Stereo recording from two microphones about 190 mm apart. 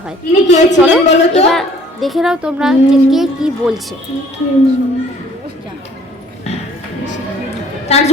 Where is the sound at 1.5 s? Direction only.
Centre (ahead or behind).